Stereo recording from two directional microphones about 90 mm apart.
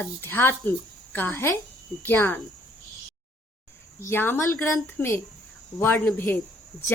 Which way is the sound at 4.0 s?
25° left (ahead or behind).